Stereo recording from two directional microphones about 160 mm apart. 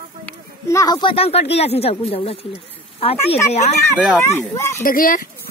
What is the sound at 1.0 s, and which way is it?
Speech, 35° left (ahead or behind).